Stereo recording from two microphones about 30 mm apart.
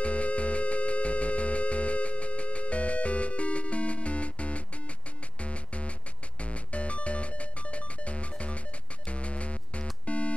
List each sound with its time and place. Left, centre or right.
0.0 s music: left